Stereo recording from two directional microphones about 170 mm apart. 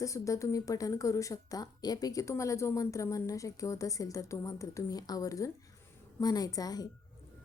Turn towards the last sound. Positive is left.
turn(degrees=20)  # may be behind; listen again after turning